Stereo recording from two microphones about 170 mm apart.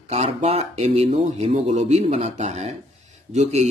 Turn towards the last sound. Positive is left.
turn(degrees=-40)  # may be behind; listen again after turning